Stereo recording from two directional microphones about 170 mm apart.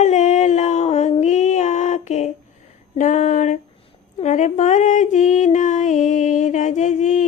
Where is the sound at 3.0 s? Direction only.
45° left (ahead or behind).